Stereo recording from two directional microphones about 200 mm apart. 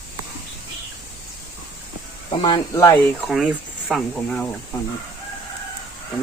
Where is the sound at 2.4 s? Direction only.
20° left (ahead or behind).